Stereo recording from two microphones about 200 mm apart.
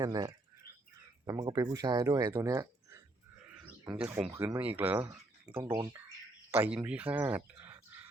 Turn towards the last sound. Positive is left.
turn(degrees=-10)  # may be behind; listen again after turning